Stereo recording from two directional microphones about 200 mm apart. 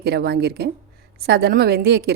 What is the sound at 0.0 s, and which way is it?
A woman's voice, 55° right (ahead or behind).